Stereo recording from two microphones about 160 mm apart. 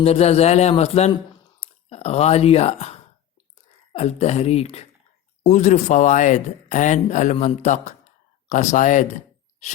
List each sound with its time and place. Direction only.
0.0 s a man's voice: 40° left (ahead or behind)